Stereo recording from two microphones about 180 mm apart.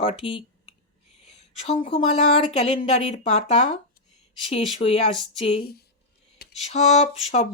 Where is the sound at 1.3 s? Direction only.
35° left (ahead or behind).